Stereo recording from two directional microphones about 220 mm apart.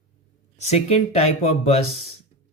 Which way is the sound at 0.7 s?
30° left (ahead or behind).